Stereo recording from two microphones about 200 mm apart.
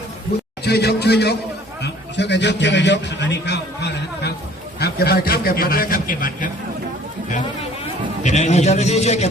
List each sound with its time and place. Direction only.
0.6 s a man's voice: 55° left (ahead or behind)
8.2 s a man's voice: 35° left (ahead or behind)